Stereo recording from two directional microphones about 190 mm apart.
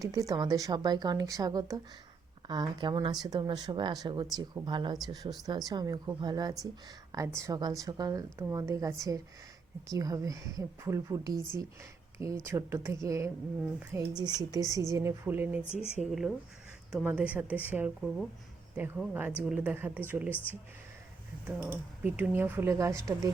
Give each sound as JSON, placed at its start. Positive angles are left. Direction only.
{"t": 0.0, "sound": "a woman's voice", "side_deg": -15}
{"t": 16.9, "sound": "a woman's voice", "side_deg": -5}
{"t": 20.3, "sound": "speech", "side_deg": 10}
{"t": 21.4, "sound": "a woman's voice", "side_deg": -10}